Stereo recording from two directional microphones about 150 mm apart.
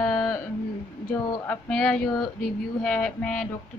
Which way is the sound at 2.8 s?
5° left (ahead or behind).